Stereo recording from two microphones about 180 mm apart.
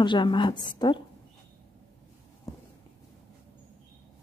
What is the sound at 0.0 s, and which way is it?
A woman's voice, 25° left (ahead or behind).